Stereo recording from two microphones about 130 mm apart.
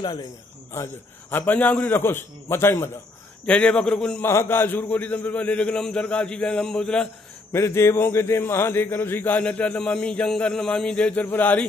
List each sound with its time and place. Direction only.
0.0 s a man's voice: 30° left (ahead or behind)
0.7 s a man's voice: 15° left (ahead or behind)
3.4 s a man's voice: 10° left (ahead or behind)
7.5 s a man's voice: 20° left (ahead or behind)